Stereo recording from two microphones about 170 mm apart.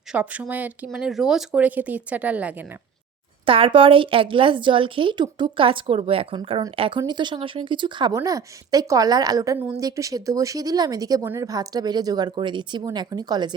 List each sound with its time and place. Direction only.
0.1 s speech: 10° right (ahead or behind)
3.4 s a woman's voice: 35° right (ahead or behind)